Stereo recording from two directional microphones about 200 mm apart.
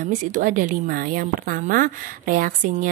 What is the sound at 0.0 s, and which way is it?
Speech, 40° right (ahead or behind).